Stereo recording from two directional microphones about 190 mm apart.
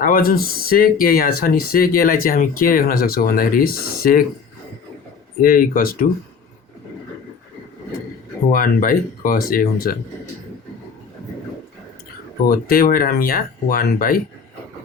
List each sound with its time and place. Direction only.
0.0 s speech: 50° left (ahead or behind)
5.4 s speech: 45° left (ahead or behind)
8.5 s speech: 45° left (ahead or behind)
12.5 s speech: 50° left (ahead or behind)